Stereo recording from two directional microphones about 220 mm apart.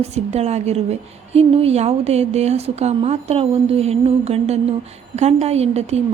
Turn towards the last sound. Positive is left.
turn(degrees=-30)  # may be behind; listen again after turning